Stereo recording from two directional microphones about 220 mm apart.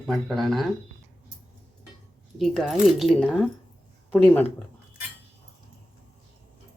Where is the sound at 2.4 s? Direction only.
Centre (ahead or behind).